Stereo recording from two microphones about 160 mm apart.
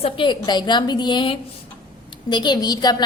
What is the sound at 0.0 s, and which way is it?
A woman's voice, 30° left (ahead or behind).